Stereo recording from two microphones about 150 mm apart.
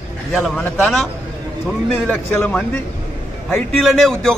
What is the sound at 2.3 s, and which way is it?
Speech, 10° left (ahead or behind).